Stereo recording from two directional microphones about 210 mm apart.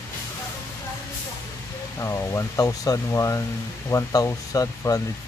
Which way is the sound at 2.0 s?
15° left (ahead or behind).